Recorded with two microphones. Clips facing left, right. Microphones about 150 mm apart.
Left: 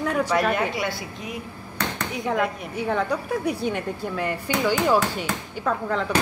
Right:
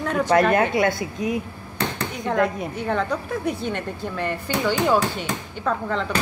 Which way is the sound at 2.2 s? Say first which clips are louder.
Right 3 dB; 5° left (ahead or behind).